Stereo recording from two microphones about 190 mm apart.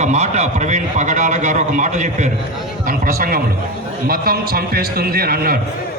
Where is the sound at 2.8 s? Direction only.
50° right (ahead or behind).